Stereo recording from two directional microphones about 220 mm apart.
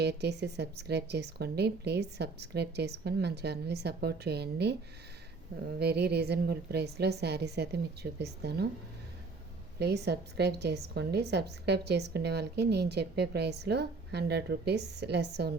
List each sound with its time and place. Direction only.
0.0 s a woman's voice: 50° right (ahead or behind)
5.8 s a woman's voice: 45° right (ahead or behind)
9.7 s a woman's voice: 50° right (ahead or behind)